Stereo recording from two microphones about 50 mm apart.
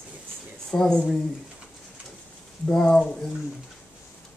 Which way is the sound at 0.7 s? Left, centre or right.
Centre.